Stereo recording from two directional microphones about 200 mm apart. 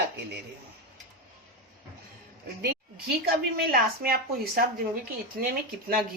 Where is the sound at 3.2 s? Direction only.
50° right (ahead or behind).